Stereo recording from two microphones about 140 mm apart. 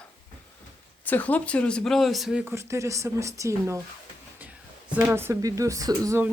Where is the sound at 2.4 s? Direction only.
20° right (ahead or behind).